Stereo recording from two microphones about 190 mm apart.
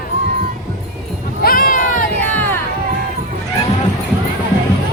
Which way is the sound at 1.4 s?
50° left (ahead or behind).